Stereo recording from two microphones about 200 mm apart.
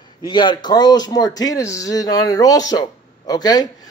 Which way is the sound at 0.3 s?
20° left (ahead or behind).